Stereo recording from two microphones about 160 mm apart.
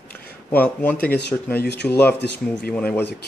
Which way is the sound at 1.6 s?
90° left.